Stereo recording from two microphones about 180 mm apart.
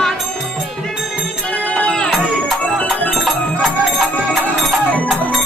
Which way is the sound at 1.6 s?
5° left (ahead or behind).